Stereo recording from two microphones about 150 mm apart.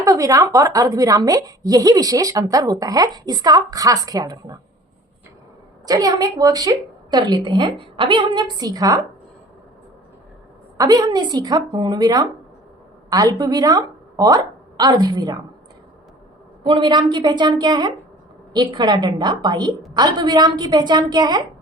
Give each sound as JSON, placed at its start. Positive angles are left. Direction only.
{"t": 0.0, "sound": "a woman's voice", "side_deg": -20}
{"t": 5.8, "sound": "a woman's voice", "side_deg": -25}
{"t": 10.8, "sound": "a woman's voice", "side_deg": -25}
{"t": 16.6, "sound": "a woman's voice", "side_deg": -30}